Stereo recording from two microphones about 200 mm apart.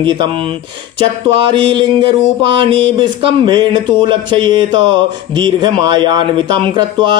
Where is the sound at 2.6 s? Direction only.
25° right (ahead or behind).